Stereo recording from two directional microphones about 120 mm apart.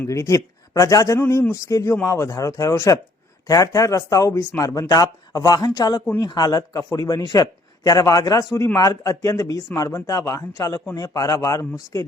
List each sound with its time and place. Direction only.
0.0 s speech: 25° left (ahead or behind)